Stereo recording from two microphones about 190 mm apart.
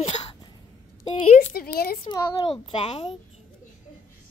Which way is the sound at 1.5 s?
55° left (ahead or behind).